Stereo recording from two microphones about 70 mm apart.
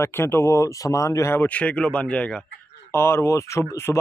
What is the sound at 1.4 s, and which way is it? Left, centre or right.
Speech, centre.